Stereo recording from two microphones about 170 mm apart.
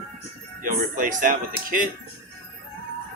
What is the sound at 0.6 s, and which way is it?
Speech, 50° right (ahead or behind).